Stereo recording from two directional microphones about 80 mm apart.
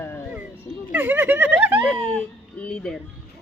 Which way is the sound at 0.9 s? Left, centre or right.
Right.